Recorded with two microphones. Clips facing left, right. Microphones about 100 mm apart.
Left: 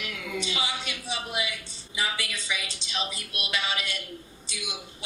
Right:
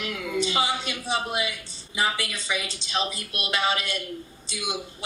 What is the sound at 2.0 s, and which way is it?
A woman's voice, 40° right (ahead or behind).